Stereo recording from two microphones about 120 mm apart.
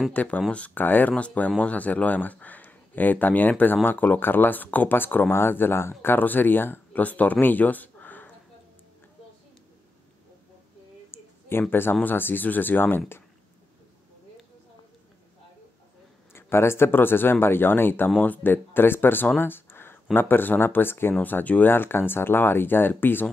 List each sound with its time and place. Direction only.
0.1 s speech: 15° left (ahead or behind)
11.1 s a sound: 20° left (ahead or behind)
11.7 s speech: 20° left (ahead or behind)
16.3 s speech: 20° left (ahead or behind)